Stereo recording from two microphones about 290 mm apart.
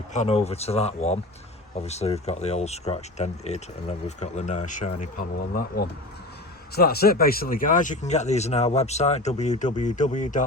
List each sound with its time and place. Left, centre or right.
0.1 s speech: left